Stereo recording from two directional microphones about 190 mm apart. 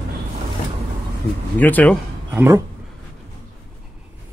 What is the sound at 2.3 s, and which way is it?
Speech, 10° right (ahead or behind).